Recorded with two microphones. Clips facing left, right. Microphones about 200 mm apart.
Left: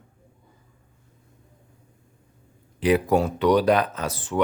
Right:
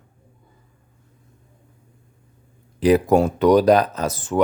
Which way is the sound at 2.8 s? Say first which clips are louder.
Right 5 dB; 40° right (ahead or behind).